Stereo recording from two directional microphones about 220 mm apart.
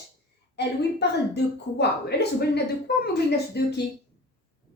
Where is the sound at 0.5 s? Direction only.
50° left (ahead or behind).